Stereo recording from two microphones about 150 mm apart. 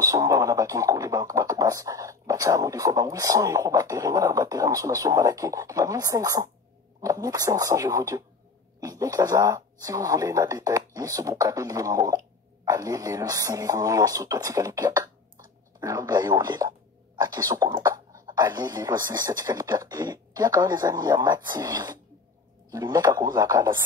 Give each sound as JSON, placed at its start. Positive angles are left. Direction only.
{"t": 0.0, "sound": "speech", "side_deg": -25}